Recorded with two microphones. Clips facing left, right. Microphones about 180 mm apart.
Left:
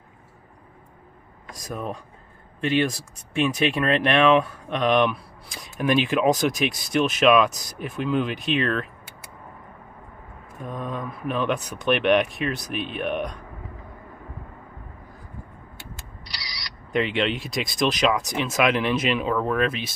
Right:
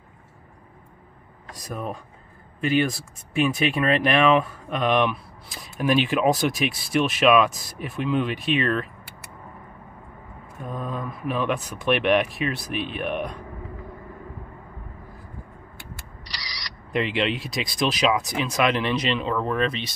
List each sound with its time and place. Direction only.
1.5 s speech: centre (ahead or behind)
10.6 s speech: centre (ahead or behind)
16.9 s speech: centre (ahead or behind)